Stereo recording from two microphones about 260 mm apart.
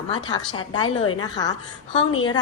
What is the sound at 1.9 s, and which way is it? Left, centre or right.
Speech, left.